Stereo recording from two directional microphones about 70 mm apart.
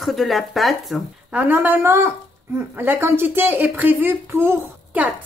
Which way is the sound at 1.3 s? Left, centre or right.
Right.